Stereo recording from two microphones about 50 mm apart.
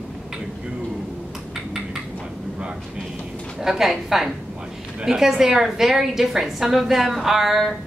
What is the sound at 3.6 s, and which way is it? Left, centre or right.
A woman's voice, centre.